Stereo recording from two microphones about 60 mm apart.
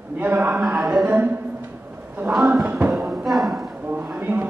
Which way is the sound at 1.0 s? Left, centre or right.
Right.